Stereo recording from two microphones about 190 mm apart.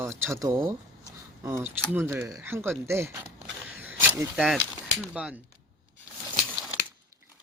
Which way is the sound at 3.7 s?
10° right (ahead or behind).